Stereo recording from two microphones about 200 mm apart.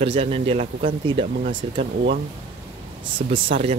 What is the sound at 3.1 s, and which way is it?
Speech, 25° right (ahead or behind).